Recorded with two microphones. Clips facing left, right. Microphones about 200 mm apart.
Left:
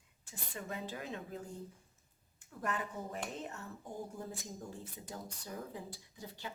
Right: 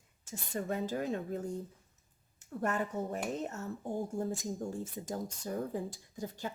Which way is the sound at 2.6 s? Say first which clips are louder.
Right 6 dB; 40° right (ahead or behind).